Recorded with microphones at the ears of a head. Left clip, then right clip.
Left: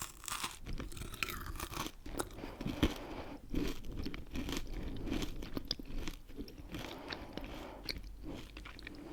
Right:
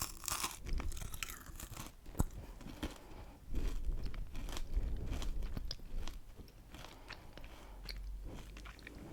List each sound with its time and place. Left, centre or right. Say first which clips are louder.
0.3 s crunch: even; centre
1.2 s crunch: left 8 dB; left
2.4 s biting: left 11 dB; left